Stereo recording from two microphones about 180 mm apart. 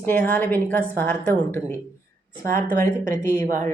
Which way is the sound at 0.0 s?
10° left (ahead or behind).